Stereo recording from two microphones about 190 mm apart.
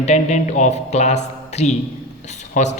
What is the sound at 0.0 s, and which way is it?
Speech, 35° left (ahead or behind).